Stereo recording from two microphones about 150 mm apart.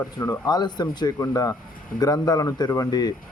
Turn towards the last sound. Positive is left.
turn(degrees=25)  # may be behind; listen again after turning